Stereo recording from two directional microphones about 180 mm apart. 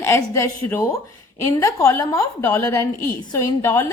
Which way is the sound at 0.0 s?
15° left (ahead or behind).